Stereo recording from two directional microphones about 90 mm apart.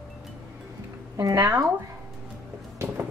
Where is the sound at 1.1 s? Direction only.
40° right (ahead or behind).